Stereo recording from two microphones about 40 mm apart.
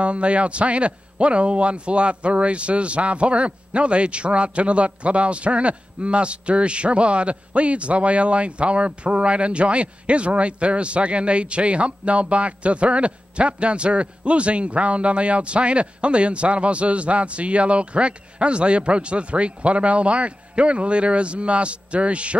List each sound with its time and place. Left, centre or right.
0.0 s a man's voice: right